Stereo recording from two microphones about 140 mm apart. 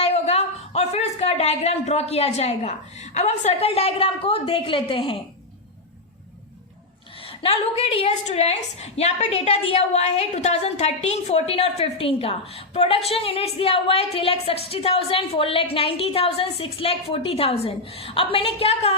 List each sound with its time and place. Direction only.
0.0 s a woman's voice: 45° left (ahead or behind)
7.3 s a woman's voice: 45° left (ahead or behind)